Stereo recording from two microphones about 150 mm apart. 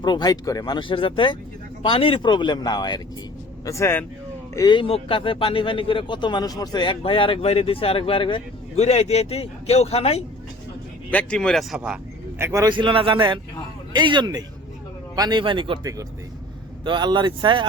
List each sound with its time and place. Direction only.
0.0 s speech: 30° left (ahead or behind)
3.7 s speech: 15° left (ahead or behind)
4.5 s speech: 30° left (ahead or behind)
11.1 s speech: 10° left (ahead or behind)
12.4 s a man's voice: 15° right (ahead or behind)
12.6 s a man's voice: 30° right (ahead or behind)